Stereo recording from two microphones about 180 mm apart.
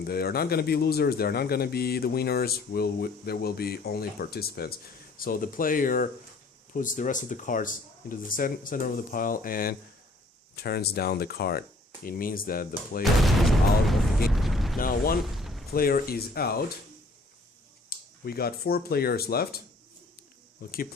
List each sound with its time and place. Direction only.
0.0 s speech: 60° left (ahead or behind)
13.0 s a sound: centre (ahead or behind)
14.8 s speech: 55° left (ahead or behind)
15.2 s a sound: centre (ahead or behind)
15.7 s speech: 55° left (ahead or behind)
17.8 s speech: 55° left (ahead or behind)
20.6 s speech: 55° left (ahead or behind)